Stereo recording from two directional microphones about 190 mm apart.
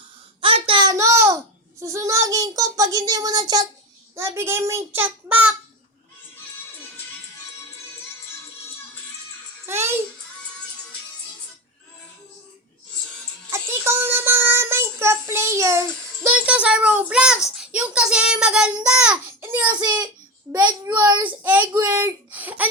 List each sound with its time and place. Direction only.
0.4 s a sound: 30° right (ahead or behind)
1.8 s a child's voice: 15° right (ahead or behind)
9.6 s a child's voice: 10° right (ahead or behind)
13.5 s child singing: 10° right (ahead or behind)
19.6 s a child's voice: 20° right (ahead or behind)
21.1 s a child's voice: 10° right (ahead or behind)